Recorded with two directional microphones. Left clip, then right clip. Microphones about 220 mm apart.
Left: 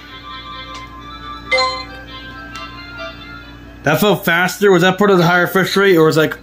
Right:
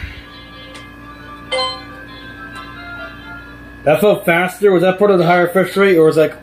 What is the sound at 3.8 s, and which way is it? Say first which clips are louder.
Speech: right 2 dB; 55° left (ahead or behind).